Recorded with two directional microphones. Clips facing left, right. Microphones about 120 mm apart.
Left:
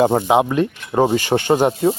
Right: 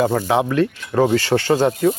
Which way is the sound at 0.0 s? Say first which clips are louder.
Left 3 dB; 25° left (ahead or behind).